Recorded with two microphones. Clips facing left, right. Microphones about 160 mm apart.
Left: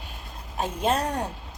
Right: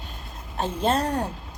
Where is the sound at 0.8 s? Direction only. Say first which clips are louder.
Right 2 dB; 10° left (ahead or behind).